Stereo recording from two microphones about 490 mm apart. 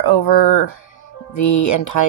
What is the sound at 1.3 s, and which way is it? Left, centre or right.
Speech, left.